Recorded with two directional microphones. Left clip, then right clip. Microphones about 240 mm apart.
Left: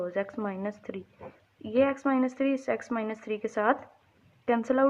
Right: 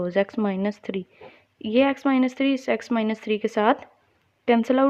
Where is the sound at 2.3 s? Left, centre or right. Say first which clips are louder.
Right 5 dB; right.